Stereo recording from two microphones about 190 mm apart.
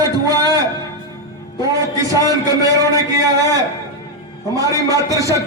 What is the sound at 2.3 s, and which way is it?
A man's voice, 20° right (ahead or behind).